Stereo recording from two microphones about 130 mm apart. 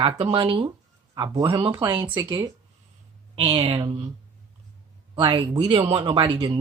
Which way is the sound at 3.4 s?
50° right (ahead or behind).